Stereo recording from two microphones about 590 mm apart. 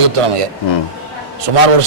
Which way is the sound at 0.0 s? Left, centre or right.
Right.